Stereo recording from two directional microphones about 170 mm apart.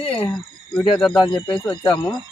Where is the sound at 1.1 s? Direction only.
25° left (ahead or behind).